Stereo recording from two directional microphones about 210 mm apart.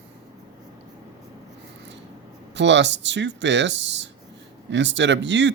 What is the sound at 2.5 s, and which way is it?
Speech, 60° right (ahead or behind).